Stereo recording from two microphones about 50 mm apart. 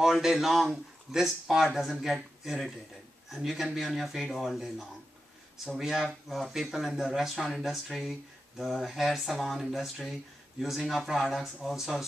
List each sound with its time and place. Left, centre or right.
0.0 s speech: centre